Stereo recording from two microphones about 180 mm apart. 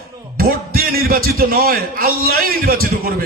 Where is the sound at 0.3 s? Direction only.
55° right (ahead or behind).